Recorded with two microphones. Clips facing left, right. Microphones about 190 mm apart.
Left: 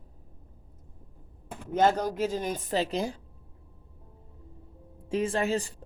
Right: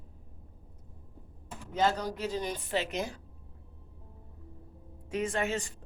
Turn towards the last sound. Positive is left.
turn(degrees=35)  # may be behind; listen again after turning